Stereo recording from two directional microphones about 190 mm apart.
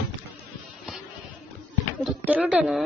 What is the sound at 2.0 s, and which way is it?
Speech, 5° right (ahead or behind).